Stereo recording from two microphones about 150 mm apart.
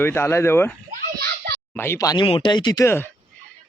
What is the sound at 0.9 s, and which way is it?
Children playing, 90° right.